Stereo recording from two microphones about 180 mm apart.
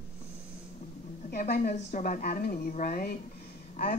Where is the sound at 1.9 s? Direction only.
45° left (ahead or behind).